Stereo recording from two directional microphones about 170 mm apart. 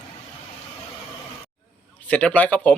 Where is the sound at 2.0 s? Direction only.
10° left (ahead or behind).